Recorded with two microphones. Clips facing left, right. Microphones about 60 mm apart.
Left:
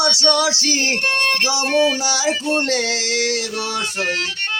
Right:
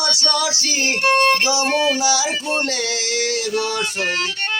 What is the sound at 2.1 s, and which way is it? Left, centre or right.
Speech, left.